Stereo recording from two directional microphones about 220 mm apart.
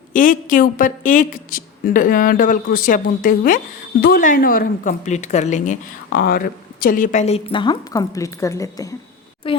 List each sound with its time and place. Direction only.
0.1 s a woman's voice: 35° left (ahead or behind)
6.1 s speech: 45° left (ahead or behind); by 9.6 s 25° left (ahead or behind)